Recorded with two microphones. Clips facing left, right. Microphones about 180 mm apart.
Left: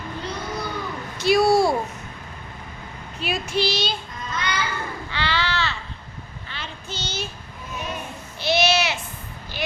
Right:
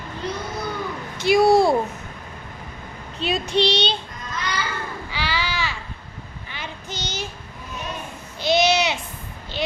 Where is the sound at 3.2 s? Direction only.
30° right (ahead or behind).